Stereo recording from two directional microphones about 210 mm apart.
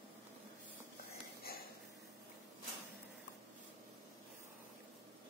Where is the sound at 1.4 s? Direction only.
45° left (ahead or behind).